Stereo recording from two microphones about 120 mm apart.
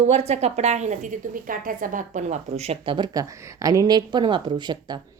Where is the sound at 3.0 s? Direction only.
30° right (ahead or behind).